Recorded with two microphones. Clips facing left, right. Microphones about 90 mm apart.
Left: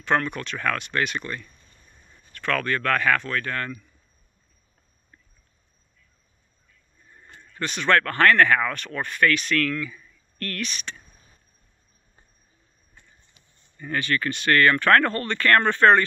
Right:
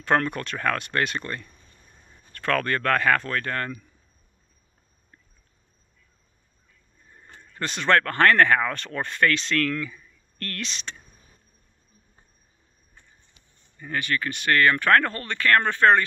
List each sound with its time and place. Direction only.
0.0 s speech: 40° right (ahead or behind)
7.3 s speech: 35° right (ahead or behind)
13.7 s speech: 15° right (ahead or behind)